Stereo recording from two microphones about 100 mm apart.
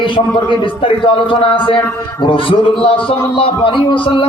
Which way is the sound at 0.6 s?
60° left (ahead or behind).